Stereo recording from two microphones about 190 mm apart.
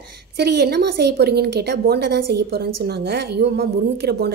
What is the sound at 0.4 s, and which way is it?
A woman's voice, 60° right (ahead or behind).